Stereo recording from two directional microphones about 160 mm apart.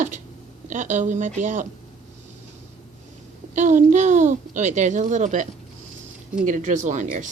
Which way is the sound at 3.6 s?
50° right (ahead or behind).